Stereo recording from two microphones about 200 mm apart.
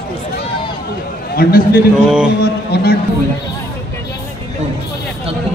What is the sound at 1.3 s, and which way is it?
A man's voice, 50° left (ahead or behind).